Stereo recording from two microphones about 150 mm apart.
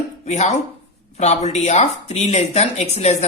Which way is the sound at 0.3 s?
50° left (ahead or behind).